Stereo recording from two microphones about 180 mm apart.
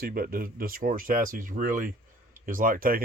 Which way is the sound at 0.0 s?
55° right (ahead or behind).